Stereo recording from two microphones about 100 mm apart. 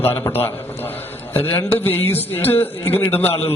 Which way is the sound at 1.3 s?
20° left (ahead or behind).